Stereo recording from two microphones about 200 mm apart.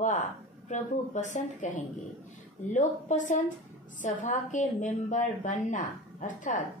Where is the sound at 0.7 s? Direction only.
35° left (ahead or behind).